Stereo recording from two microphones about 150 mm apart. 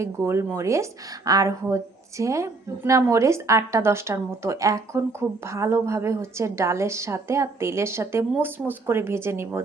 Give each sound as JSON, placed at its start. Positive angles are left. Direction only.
{"t": 0.0, "sound": "a woman's voice", "side_deg": -15}